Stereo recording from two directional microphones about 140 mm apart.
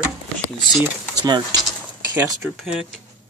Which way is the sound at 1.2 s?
30° right (ahead or behind).